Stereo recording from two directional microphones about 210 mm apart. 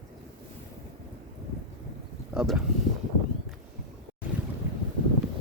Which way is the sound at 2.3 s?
5° right (ahead or behind).